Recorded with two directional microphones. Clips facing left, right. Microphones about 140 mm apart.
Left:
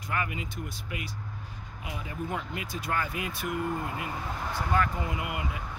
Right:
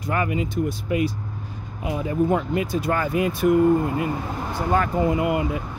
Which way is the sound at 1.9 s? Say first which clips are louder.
Right 14 dB; 35° right (ahead or behind).